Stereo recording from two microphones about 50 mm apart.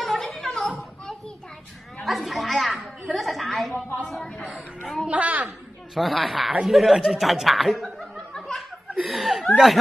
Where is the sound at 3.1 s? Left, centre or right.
Centre.